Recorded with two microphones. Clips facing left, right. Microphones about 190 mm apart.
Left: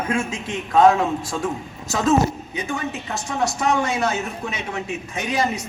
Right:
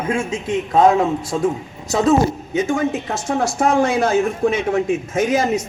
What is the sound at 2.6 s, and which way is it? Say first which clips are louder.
A woman's voice: right 8 dB; 45° right (ahead or behind).